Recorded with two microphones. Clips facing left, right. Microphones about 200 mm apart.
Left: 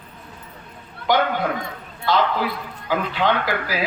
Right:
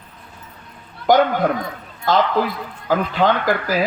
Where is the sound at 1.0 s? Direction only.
45° right (ahead or behind).